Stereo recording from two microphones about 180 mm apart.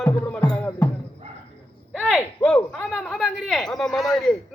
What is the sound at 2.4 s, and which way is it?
A man's voice, 10° left (ahead or behind).